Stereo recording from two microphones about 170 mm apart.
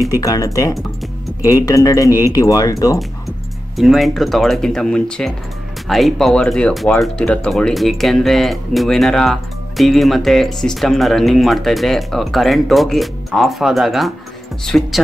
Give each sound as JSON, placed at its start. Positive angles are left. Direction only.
{"t": 0.2, "sound": "speech", "side_deg": 20}
{"t": 3.7, "sound": "speech", "side_deg": 0}